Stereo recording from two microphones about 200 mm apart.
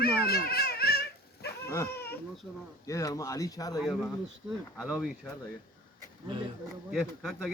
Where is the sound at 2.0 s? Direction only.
5° left (ahead or behind).